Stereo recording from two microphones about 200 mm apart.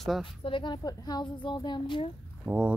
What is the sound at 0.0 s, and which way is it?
Speech, centre (ahead or behind).